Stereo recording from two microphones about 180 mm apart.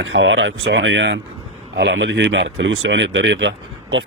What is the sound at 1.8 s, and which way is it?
Speech, 70° right (ahead or behind).